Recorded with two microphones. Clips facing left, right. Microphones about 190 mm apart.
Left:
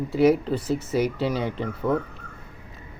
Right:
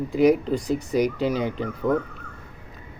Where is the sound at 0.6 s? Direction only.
5° left (ahead or behind).